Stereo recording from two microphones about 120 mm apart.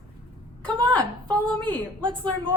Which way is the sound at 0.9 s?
10° left (ahead or behind).